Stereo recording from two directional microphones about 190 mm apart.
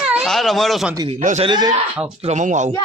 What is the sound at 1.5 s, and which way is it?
Speech, 20° right (ahead or behind).